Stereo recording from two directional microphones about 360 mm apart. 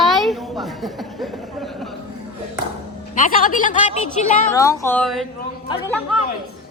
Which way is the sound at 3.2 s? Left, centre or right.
Left.